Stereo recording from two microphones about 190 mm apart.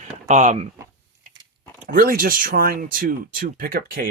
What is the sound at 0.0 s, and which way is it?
Speech, 40° right (ahead or behind).